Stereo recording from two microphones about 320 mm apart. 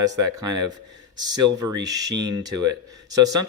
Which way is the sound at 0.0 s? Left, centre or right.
Centre.